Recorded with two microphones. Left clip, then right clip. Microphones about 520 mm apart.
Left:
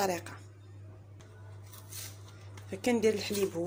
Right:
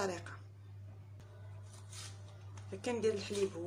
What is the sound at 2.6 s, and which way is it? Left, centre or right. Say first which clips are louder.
Speech: left 7 dB; right.